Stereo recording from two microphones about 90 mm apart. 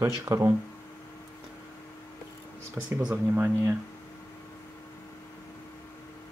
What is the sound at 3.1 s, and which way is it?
Speech, 15° right (ahead or behind).